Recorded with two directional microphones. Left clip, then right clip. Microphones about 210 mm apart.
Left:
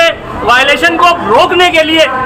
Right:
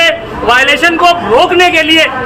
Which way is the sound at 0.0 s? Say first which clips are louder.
Even; 10° right (ahead or behind).